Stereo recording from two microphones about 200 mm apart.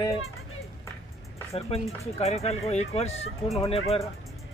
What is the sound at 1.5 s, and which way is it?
Speech, 30° left (ahead or behind).